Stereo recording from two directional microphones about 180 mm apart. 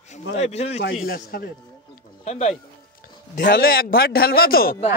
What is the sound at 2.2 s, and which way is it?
Speech, 35° left (ahead or behind).